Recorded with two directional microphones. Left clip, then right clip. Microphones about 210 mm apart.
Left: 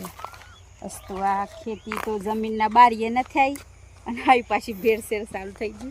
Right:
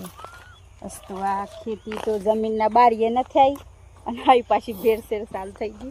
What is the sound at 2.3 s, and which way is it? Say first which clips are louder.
Speech: right 4 dB; 30° left (ahead or behind).